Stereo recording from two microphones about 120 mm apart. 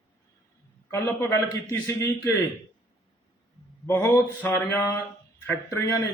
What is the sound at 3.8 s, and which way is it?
A man's voice, 20° left (ahead or behind).